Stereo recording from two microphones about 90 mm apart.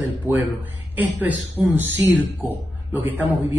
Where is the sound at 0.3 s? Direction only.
30° left (ahead or behind).